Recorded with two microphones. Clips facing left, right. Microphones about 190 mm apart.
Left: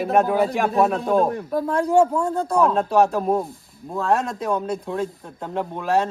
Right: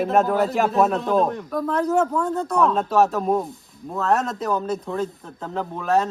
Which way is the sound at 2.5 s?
Centre (ahead or behind).